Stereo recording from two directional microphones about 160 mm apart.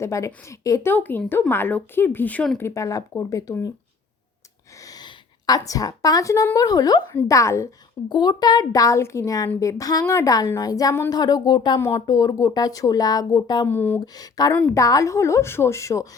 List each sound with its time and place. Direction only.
0.0 s a woman's voice: 20° left (ahead or behind)
4.9 s a woman's voice: 25° left (ahead or behind)
13.7 s speech: 10° left (ahead or behind)
14.0 s a woman's voice: 25° left (ahead or behind)